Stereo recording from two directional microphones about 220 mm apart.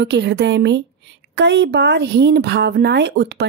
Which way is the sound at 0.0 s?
50° right (ahead or behind).